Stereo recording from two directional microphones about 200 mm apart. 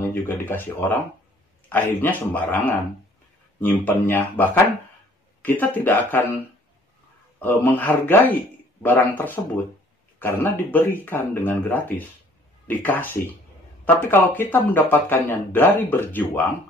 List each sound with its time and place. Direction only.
0.1 s speech: 10° left (ahead or behind)
7.3 s speech: 10° left (ahead or behind)